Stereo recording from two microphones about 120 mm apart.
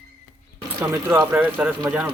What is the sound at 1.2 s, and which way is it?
Speech, 15° right (ahead or behind).